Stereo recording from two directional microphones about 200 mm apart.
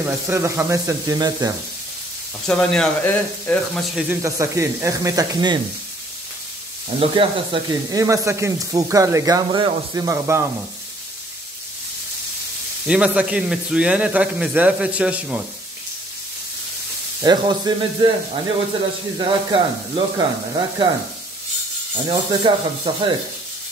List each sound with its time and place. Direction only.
0.0 s sizzle: 10° right (ahead or behind)
2.4 s speech: 5° left (ahead or behind)
4.1 s sizzle: 15° right (ahead or behind)
7.0 s sizzle: 25° right (ahead or behind)
12.8 s speech: 5° right (ahead or behind)
17.2 s speech: 20° right (ahead or behind)
21.9 s speech: 25° right (ahead or behind)